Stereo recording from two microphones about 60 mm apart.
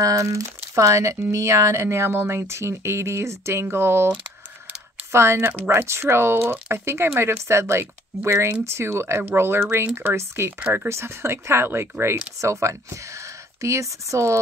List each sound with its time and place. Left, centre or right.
0.0 s speech: right
5.1 s speech: right